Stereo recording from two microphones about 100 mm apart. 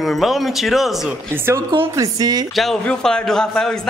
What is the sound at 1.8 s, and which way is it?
Speech, 35° right (ahead or behind).